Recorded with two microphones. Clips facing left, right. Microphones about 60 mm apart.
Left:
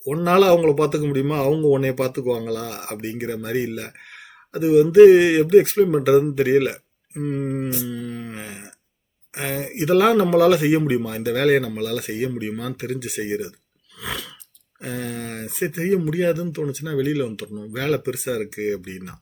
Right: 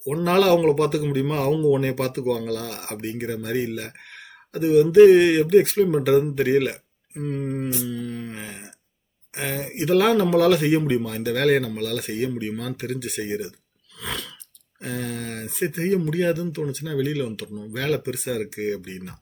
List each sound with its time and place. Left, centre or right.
0.0 s speech: centre
14.0 s a sound: centre
14.8 s speech: centre